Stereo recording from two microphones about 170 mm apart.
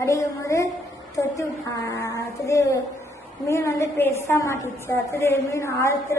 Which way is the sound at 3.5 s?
15° left (ahead or behind).